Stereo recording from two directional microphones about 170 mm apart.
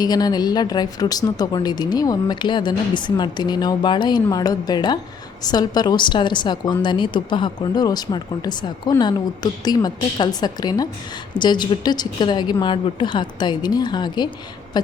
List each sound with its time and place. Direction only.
0.0 s speech: 25° left (ahead or behind)